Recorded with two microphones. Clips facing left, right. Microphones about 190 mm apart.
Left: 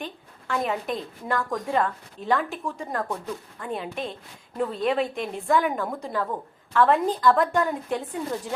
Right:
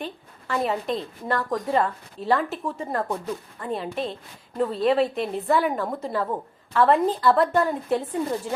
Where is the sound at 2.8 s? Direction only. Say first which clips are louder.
Right 3 dB; 5° right (ahead or behind).